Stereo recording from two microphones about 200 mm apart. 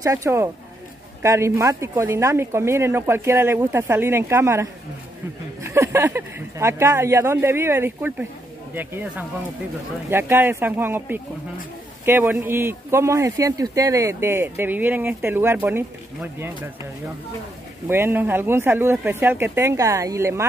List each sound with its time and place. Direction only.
0.0 s speech: 15° right (ahead or behind)
17.8 s speech: 10° right (ahead or behind)